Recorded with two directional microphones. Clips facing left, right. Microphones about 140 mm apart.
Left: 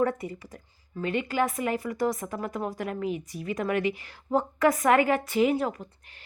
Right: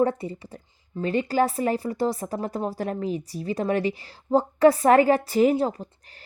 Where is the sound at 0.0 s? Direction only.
30° right (ahead or behind).